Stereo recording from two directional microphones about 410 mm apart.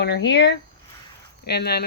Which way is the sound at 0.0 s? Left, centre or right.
Left.